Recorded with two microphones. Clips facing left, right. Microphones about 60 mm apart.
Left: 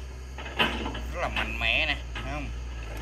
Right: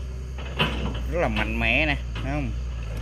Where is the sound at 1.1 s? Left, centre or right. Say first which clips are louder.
Right 8 dB; right.